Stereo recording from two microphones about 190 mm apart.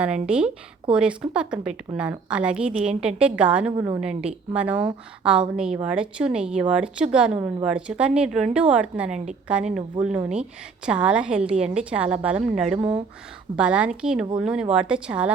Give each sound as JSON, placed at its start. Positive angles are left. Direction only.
{"t": 0.3, "sound": "a woman's voice", "side_deg": -5}
{"t": 3.7, "sound": "a woman's voice", "side_deg": -15}